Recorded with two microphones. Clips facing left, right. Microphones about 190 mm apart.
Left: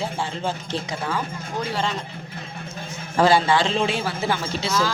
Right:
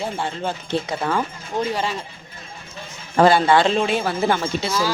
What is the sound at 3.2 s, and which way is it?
A man's voice, 55° right (ahead or behind).